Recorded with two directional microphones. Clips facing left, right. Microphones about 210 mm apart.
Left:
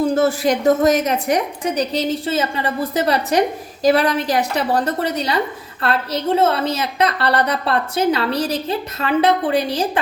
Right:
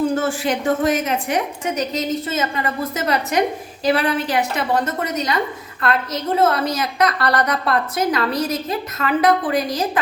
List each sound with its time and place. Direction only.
0.2 s a woman's voice: 40° left (ahead or behind)